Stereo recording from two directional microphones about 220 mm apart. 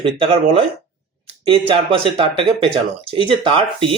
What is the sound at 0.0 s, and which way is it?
Speech, 25° right (ahead or behind).